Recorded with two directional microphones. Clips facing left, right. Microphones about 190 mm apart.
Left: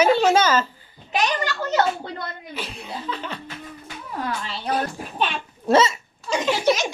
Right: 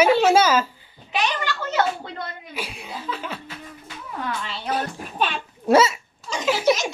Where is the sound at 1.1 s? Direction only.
40° left (ahead or behind).